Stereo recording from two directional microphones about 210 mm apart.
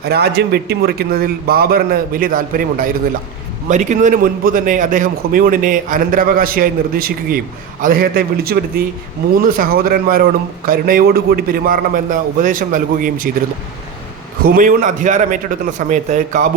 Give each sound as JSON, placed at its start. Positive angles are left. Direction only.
{"t": 0.0, "sound": "a man's voice", "side_deg": -50}
{"t": 14.4, "sound": "a man's voice", "side_deg": -40}